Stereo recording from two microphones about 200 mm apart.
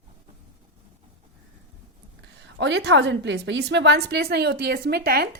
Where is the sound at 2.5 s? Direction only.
60° right (ahead or behind).